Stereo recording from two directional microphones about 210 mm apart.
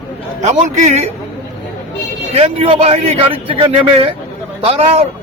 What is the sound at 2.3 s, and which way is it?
Speech, 30° right (ahead or behind).